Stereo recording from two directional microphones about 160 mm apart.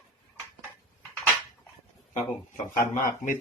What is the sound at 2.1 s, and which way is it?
Speech, 50° left (ahead or behind).